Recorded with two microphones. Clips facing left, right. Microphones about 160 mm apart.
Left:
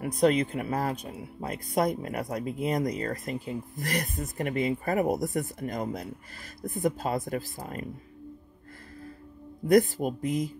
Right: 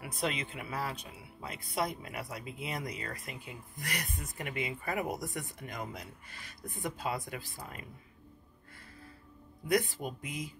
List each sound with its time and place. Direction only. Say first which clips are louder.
0.0 s speech: left 12 dB; 40° left (ahead or behind)
9.7 s speech: left 9 dB; 40° left (ahead or behind)